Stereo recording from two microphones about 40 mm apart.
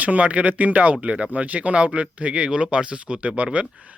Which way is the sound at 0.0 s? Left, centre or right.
Right.